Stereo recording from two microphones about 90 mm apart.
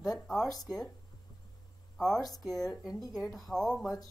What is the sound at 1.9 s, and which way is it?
A woman's voice, 5° left (ahead or behind).